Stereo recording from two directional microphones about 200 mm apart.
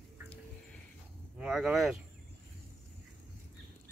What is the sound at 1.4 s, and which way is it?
Speech, 5° right (ahead or behind).